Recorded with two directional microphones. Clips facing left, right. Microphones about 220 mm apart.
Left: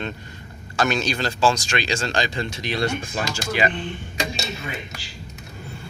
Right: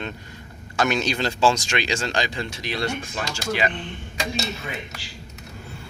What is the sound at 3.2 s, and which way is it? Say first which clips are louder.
Speech: left 1 dB; 5° left (ahead or behind).